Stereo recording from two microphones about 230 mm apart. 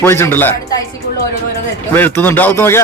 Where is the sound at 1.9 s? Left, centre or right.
Centre.